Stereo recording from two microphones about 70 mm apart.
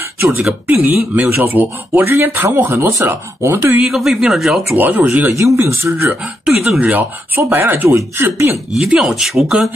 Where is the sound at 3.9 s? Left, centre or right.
Centre.